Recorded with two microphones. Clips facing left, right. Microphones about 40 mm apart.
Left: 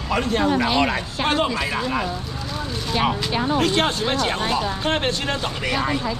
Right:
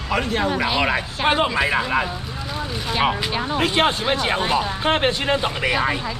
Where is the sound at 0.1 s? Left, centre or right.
Centre.